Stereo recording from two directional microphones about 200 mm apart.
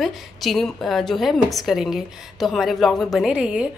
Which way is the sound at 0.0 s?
Centre (ahead or behind).